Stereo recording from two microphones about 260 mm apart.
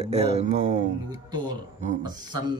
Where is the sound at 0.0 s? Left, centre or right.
Right.